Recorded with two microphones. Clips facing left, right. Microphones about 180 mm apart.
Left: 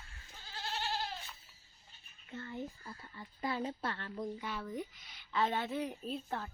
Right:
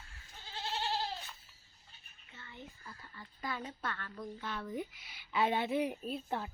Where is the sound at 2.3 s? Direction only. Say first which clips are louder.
Left 11 dB; 45° left (ahead or behind).